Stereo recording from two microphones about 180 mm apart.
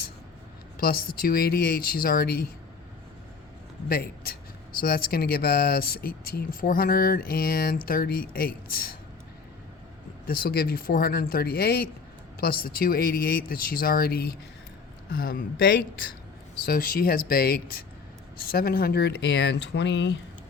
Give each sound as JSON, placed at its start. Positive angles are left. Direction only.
{"t": 0.8, "sound": "speech", "side_deg": 55}
{"t": 3.8, "sound": "speech", "side_deg": 60}
{"t": 10.2, "sound": "speech", "side_deg": 55}